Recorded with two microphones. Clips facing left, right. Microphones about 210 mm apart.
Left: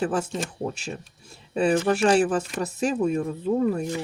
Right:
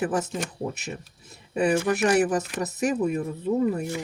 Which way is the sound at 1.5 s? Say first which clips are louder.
Left 1 dB; 20° right (ahead or behind).